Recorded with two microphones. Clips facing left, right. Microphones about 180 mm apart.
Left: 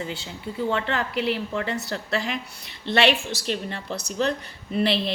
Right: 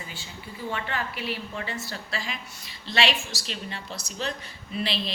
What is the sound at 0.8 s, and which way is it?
A woman's voice, 70° left (ahead or behind).